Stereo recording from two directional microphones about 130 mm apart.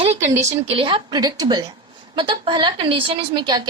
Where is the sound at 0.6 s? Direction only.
45° right (ahead or behind).